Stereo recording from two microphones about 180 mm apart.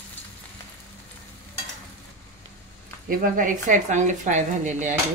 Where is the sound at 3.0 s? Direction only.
50° right (ahead or behind).